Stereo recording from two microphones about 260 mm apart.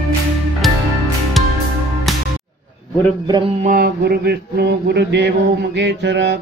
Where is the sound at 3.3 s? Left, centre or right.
Right.